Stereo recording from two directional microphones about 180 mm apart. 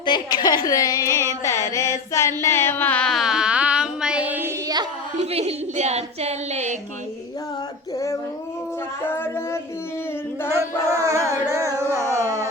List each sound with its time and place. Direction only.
0.0 s a woman's voice: 25° left (ahead or behind)
1.5 s music: 15° left (ahead or behind); by 4.5 s 10° right (ahead or behind)
5.2 s a woman's voice: 35° right (ahead or behind)
7.9 s child singing: 15° left (ahead or behind)
9.0 s speech: 10° left (ahead or behind)
10.5 s music: 15° right (ahead or behind)